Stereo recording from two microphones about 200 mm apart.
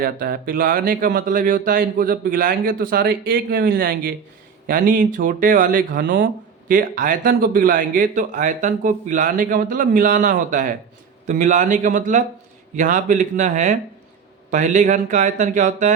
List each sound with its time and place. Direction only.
0.0 s speech: 45° right (ahead or behind)